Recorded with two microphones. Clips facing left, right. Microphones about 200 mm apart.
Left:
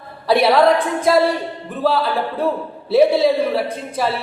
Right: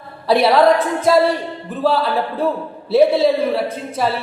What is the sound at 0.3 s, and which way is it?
A woman's voice, centre (ahead or behind).